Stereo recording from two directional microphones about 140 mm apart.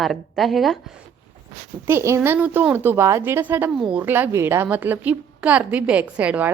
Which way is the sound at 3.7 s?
5° right (ahead or behind).